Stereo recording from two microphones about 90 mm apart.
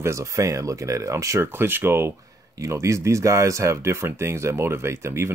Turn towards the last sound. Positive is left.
turn(degrees=-30)  # may be behind; listen again after turning